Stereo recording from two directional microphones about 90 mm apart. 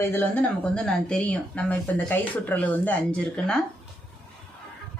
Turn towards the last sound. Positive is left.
turn(degrees=15)  # may be behind; listen again after turning